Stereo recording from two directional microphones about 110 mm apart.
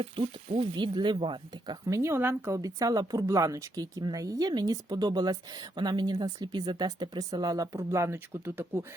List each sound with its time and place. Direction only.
0.0 s speech: 55° right (ahead or behind)
1.9 s a woman's voice: 25° right (ahead or behind)